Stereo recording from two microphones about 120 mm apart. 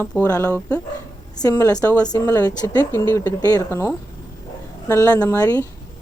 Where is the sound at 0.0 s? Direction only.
10° left (ahead or behind).